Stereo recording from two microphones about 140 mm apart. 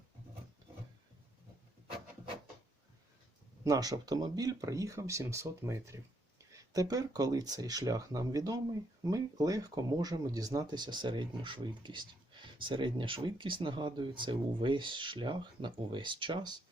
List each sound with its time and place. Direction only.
3.6 s speech: 25° right (ahead or behind)